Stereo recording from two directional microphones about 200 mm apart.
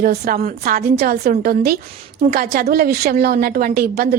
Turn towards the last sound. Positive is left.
turn(degrees=-50)  # may be behind; listen again after turning